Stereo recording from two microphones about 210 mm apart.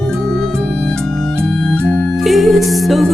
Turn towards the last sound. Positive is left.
turn(degrees=0)  # may be behind; listen again after turning